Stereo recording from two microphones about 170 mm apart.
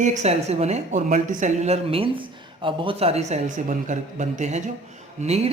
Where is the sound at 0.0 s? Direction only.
45° right (ahead or behind).